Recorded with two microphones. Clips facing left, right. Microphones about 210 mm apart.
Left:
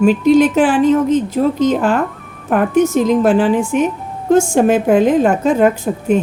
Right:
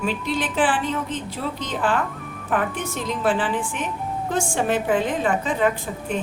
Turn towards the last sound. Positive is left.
turn(degrees=45)  # may be behind; listen again after turning